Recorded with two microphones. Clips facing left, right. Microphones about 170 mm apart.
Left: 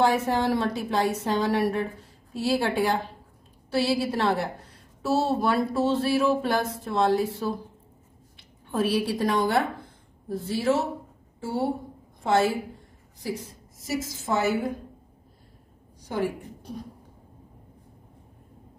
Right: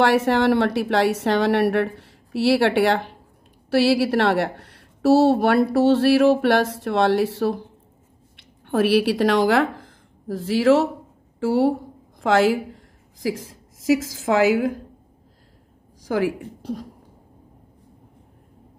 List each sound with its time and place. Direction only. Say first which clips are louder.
0.0 s a woman's voice: right 5 dB; 75° right (ahead or behind)
16.0 s a woman's voice: right 6 dB; 90° right